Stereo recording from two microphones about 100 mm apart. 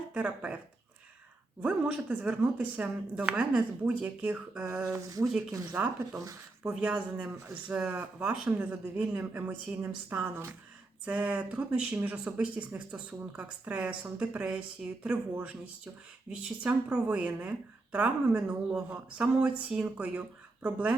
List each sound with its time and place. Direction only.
0.1 s speech: 15° right (ahead or behind)
1.6 s speech: 15° right (ahead or behind)
4.9 s speech: 35° right (ahead or behind)
5.7 s speech: 10° right (ahead or behind)
6.1 s speech: 30° right (ahead or behind)
6.7 s speech: 10° right (ahead or behind)